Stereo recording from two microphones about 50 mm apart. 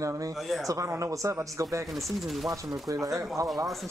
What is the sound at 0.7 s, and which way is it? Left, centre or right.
Speech, right.